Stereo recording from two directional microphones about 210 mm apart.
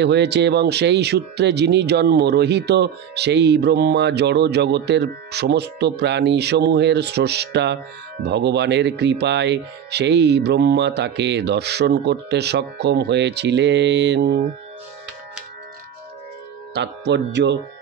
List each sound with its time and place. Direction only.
0.0 s speech: 55° right (ahead or behind)
16.7 s speech: 55° right (ahead or behind)